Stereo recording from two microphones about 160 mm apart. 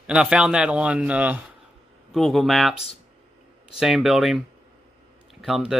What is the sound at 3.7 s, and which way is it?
Speech, centre (ahead or behind).